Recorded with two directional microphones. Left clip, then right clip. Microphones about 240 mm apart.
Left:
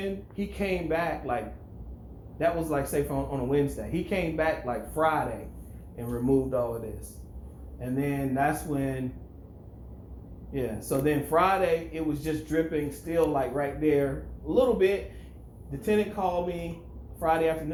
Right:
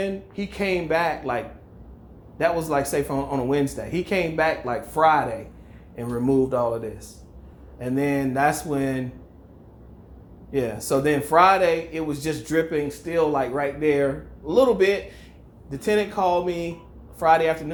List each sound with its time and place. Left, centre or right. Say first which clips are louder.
0.0 s speech: right 6 dB; right
2.4 s speech: right 5 dB; right
7.8 s speech: right 7 dB; right
10.5 s speech: right 7 dB; right